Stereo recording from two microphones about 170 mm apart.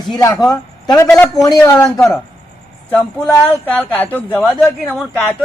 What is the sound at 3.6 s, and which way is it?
A woman's voice, 10° left (ahead or behind).